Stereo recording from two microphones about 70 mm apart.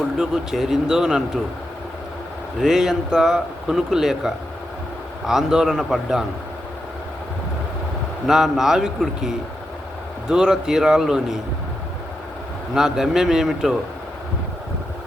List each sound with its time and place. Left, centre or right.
0.2 s speech: centre
2.6 s speech: centre
8.3 s speech: centre
12.7 s speech: centre